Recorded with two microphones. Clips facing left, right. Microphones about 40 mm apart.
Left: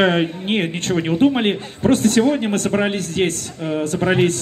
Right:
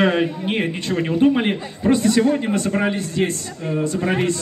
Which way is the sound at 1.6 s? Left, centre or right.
Left.